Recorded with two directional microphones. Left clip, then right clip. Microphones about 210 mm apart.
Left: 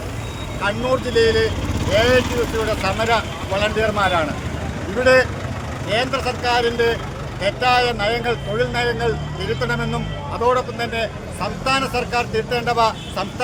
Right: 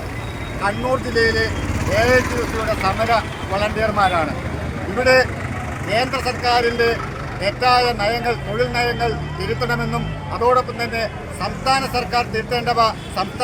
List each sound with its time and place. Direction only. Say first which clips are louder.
0.6 s a man's voice: even; 20° left (ahead or behind)